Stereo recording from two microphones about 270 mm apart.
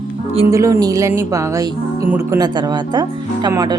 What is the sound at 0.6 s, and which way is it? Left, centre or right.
Speech, centre.